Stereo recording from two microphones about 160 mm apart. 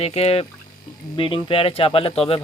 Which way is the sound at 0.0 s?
40° left (ahead or behind).